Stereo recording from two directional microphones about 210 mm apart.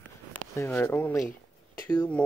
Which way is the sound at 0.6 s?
10° left (ahead or behind).